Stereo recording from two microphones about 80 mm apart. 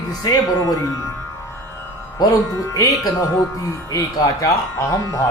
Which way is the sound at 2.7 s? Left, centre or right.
Left.